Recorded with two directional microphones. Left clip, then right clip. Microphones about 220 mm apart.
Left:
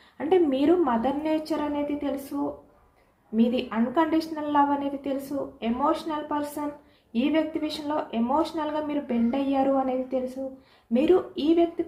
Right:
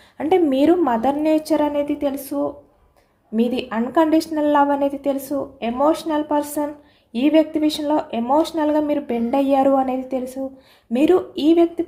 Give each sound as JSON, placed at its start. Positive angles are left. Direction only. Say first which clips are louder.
{"t": 0.2, "sound": "a woman's voice", "louder": "right 6 dB", "side_deg": -50}
{"t": 3.3, "sound": "a woman's voice", "louder": "right 4 dB", "side_deg": -55}